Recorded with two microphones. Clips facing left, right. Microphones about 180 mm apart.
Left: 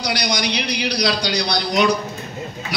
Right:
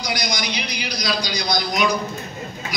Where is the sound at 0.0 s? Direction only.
70° left (ahead or behind).